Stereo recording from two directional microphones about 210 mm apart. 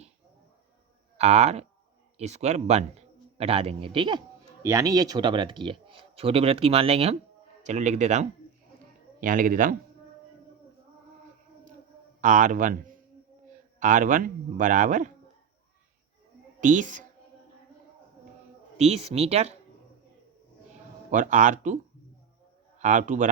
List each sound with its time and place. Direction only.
1.1 s a man's voice: 30° right (ahead or behind)
12.2 s a man's voice: 35° right (ahead or behind)
16.6 s a woman's voice: 35° right (ahead or behind)
18.8 s a man's voice: 30° right (ahead or behind)
21.1 s a man's voice: 35° right (ahead or behind)
22.8 s a man's voice: 35° right (ahead or behind)